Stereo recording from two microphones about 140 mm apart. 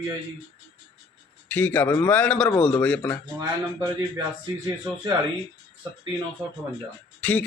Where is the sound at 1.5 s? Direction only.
15° left (ahead or behind).